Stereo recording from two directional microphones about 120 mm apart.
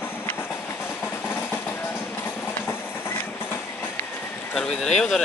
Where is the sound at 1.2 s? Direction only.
20° left (ahead or behind).